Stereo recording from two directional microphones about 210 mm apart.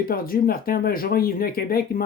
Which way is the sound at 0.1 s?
45° left (ahead or behind).